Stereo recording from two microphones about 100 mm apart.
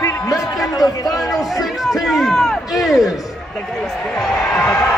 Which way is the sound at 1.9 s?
Centre (ahead or behind).